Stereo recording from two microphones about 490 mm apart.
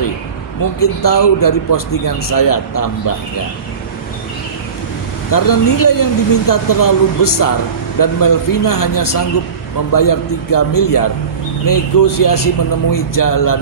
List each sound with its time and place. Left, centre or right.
0.6 s speech: left
5.3 s speech: left